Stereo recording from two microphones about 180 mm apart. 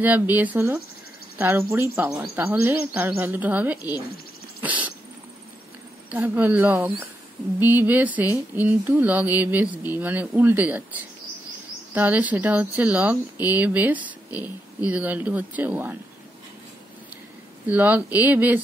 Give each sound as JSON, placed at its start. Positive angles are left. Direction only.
{"t": 0.0, "sound": "speech", "side_deg": -10}
{"t": 4.6, "sound": "a sound", "side_deg": -10}
{"t": 6.0, "sound": "speech", "side_deg": -10}
{"t": 14.3, "sound": "speech", "side_deg": 20}
{"t": 14.9, "sound": "speech", "side_deg": -10}
{"t": 17.6, "sound": "speech", "side_deg": -10}